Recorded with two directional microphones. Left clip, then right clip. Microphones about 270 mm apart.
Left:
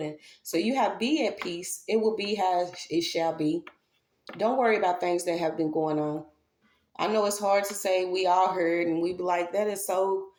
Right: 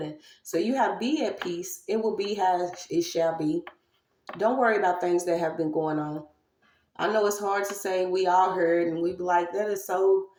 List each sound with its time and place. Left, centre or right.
0.4 s speech: left
7.1 s speech: left